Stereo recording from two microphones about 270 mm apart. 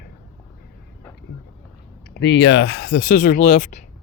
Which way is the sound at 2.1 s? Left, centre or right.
Left.